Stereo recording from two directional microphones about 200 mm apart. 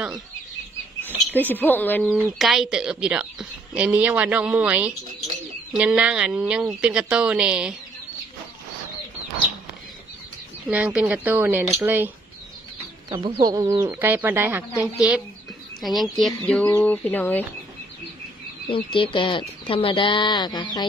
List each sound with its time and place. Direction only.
1.3 s speech: 10° left (ahead or behind)
2.0 s speech: centre (ahead or behind)
10.7 s speech: 5° right (ahead or behind)
13.1 s speech: 20° right (ahead or behind); by 17.5 s 10° left (ahead or behind)
18.7 s speech: 25° left (ahead or behind)